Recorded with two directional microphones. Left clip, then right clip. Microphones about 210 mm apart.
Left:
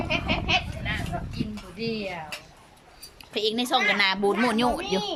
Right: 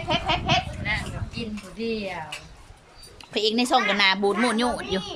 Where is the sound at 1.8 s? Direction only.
5° left (ahead or behind).